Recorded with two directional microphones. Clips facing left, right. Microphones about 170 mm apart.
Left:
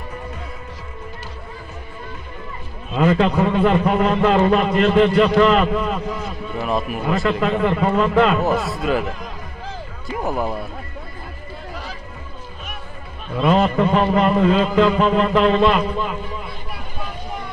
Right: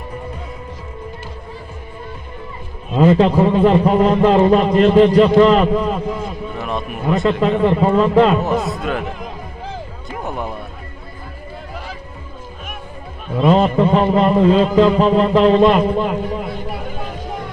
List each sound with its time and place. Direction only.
3.0 s a man's voice: 30° right (ahead or behind)
6.5 s a sound: centre (ahead or behind)
7.2 s a man's voice: 20° right (ahead or behind)
8.7 s a man's voice: centre (ahead or behind)
10.0 s music: centre (ahead or behind)
13.4 s a man's voice: 25° right (ahead or behind)
15.9 s a man's voice: 50° right (ahead or behind)